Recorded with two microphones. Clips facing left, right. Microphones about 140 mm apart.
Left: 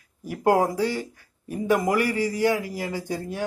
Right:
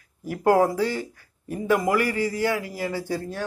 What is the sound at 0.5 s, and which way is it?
A man's voice, 15° left (ahead or behind).